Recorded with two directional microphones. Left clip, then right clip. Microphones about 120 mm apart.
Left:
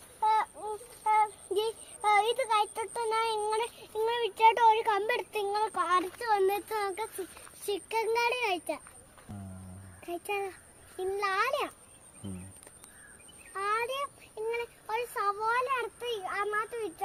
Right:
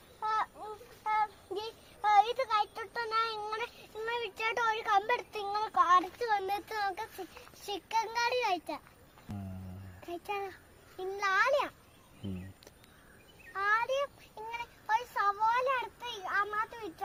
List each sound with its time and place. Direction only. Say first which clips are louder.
0.2 s a sound: left 6 dB; 15° right (ahead or behind)
7.6 s a child's voice: left 2 dB; 15° right (ahead or behind)
9.3 s music: right 2 dB; centre (ahead or behind)
10.1 s a child's voice: left 3 dB; 15° right (ahead or behind)
13.6 s child singing: right 1 dB; 20° right (ahead or behind)